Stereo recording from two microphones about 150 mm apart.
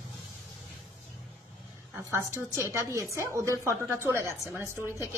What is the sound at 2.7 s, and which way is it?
A woman's voice, 20° right (ahead or behind).